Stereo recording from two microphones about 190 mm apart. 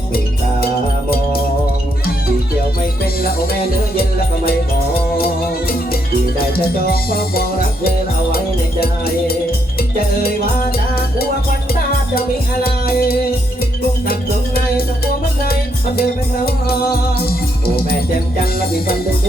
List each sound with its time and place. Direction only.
5.1 s music: 55° left (ahead or behind)
10.2 s music: 55° left (ahead or behind)
12.6 s music: 50° left (ahead or behind)